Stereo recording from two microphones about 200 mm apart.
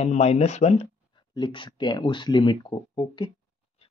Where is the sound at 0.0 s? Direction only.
35° left (ahead or behind).